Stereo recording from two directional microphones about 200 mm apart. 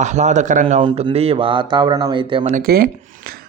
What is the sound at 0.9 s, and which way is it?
Speech, 25° right (ahead or behind).